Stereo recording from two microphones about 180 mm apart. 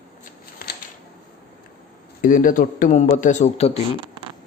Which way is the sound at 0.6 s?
55° left (ahead or behind).